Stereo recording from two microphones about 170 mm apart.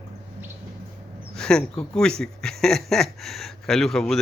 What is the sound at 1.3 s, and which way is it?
Speech, 5° left (ahead or behind).